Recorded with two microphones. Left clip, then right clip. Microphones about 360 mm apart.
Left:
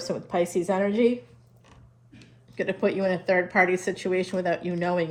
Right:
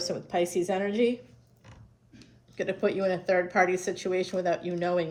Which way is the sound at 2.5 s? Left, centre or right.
Centre.